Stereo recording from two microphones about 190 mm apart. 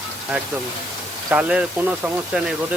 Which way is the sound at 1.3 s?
5° right (ahead or behind).